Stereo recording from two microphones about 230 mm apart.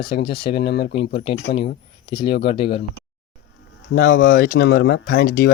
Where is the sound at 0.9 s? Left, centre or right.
Left.